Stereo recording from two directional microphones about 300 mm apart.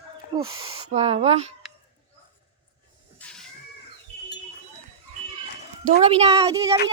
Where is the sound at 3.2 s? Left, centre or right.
Centre.